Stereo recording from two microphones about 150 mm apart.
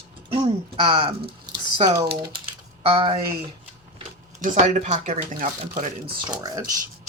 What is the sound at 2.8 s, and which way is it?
Speech, 35° right (ahead or behind).